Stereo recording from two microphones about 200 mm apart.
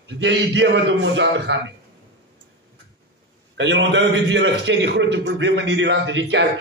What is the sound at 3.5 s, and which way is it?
A man's voice, 65° right (ahead or behind).